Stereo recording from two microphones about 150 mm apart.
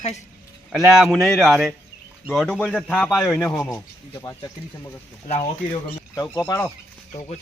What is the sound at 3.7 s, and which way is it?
Speech, 20° left (ahead or behind).